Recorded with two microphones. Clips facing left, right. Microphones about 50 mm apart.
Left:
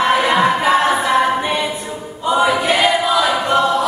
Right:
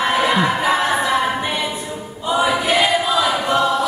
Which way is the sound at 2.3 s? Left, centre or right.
Left.